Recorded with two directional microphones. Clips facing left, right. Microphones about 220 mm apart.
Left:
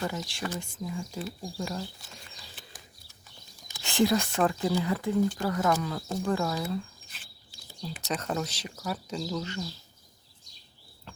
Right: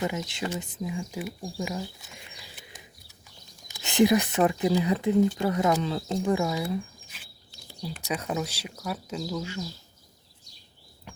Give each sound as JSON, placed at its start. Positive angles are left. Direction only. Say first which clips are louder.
{"t": 0.0, "sound": "speech", "louder": "right 3 dB", "side_deg": -20}
{"t": 1.6, "sound": "bird", "louder": "right 2 dB", "side_deg": -10}
{"t": 3.7, "sound": "speech", "louder": "right 4 dB", "side_deg": -20}